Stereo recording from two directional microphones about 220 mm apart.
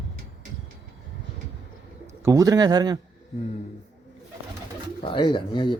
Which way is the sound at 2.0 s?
15° right (ahead or behind).